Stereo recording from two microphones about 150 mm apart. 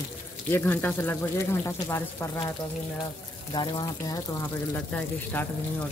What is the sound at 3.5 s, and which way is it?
Speech, 30° left (ahead or behind).